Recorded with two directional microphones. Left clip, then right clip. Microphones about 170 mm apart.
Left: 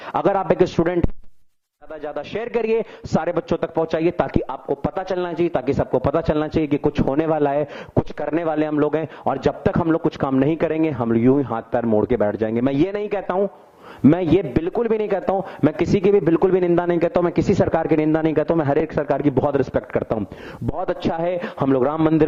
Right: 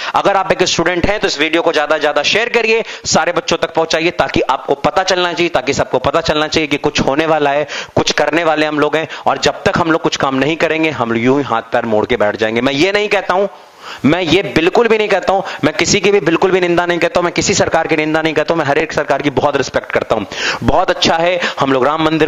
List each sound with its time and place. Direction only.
0.1 s a man's voice: 10° right (ahead or behind)